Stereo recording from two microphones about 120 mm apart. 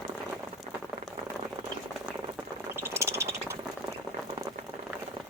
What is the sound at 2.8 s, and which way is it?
Bird, 20° right (ahead or behind).